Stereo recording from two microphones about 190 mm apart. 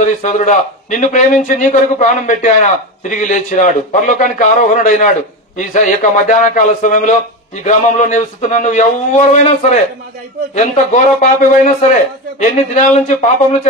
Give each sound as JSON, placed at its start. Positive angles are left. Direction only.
{"t": 0.0, "sound": "a man's voice", "side_deg": 40}